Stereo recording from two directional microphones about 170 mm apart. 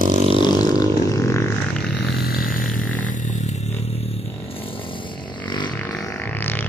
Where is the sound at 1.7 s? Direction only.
5° left (ahead or behind).